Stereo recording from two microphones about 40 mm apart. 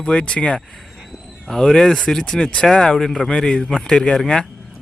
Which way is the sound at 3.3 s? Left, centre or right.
Centre.